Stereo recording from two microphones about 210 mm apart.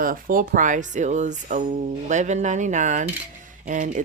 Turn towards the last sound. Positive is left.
turn(degrees=-35)  # may be behind; listen again after turning